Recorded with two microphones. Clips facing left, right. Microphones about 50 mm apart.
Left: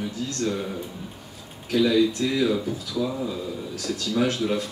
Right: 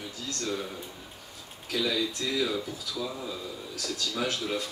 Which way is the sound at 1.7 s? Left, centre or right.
Centre.